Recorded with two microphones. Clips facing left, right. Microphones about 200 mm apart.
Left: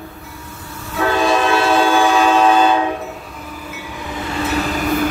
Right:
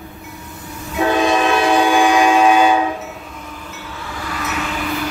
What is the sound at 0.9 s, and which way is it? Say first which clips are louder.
Train: right 1 dB; 20° right (ahead or behind).